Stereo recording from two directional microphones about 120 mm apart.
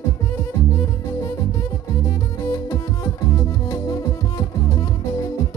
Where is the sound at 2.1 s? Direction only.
25° left (ahead or behind).